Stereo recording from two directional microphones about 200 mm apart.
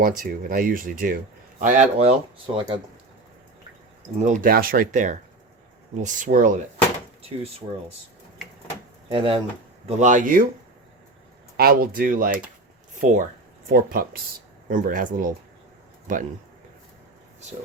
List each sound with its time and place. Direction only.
0.2 s speech: 45° right (ahead or behind); by 2.8 s 25° right (ahead or behind)
4.2 s speech: 40° right (ahead or behind)
9.0 s speech: 25° right (ahead or behind)
9.8 s speech: 35° right (ahead or behind)
11.5 s speech: 50° right (ahead or behind)